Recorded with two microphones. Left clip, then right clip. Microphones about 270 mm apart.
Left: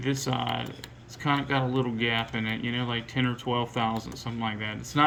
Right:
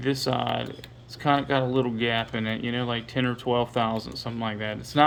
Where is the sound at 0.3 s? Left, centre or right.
Centre.